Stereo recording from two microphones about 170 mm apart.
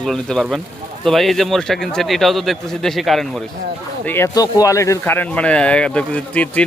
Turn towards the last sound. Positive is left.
turn(degrees=10)  # may be behind; listen again after turning